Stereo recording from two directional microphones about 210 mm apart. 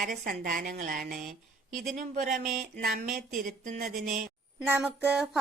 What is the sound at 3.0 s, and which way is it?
Speech, 40° right (ahead or behind).